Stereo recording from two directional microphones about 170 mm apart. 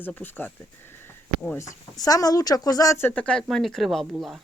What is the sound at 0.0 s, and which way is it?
Speech, 10° left (ahead or behind).